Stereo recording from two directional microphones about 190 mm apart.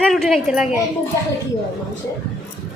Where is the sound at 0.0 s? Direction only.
Centre (ahead or behind).